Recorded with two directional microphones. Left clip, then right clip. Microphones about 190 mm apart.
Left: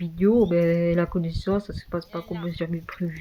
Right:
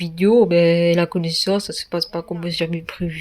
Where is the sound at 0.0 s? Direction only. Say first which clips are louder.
Right 6 dB; 25° right (ahead or behind).